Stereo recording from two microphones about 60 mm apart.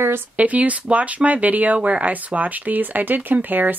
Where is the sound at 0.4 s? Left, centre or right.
Right.